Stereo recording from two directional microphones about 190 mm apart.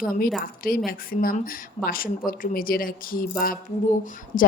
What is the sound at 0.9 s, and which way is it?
A woman's voice, 50° left (ahead or behind).